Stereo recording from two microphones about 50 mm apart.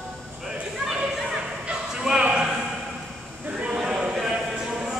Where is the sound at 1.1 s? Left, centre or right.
Centre.